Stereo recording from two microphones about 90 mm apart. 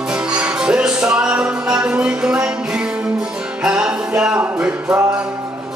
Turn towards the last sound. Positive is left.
turn(degrees=-10)  # may be behind; listen again after turning